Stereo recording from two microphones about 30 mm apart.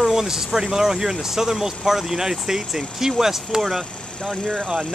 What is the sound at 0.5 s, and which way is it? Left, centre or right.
Speech, centre.